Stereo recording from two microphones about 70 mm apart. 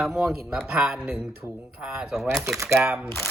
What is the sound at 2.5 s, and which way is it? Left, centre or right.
Speech, right.